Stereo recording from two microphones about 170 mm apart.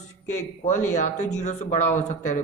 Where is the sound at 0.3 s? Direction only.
45° left (ahead or behind).